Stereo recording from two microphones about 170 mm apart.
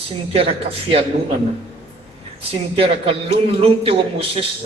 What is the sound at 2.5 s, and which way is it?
Speech, 35° right (ahead or behind).